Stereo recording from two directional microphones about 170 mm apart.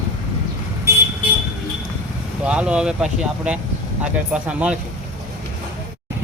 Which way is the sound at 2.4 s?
5° right (ahead or behind).